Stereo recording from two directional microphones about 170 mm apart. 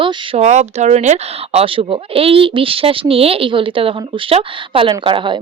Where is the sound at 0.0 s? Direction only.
30° right (ahead or behind).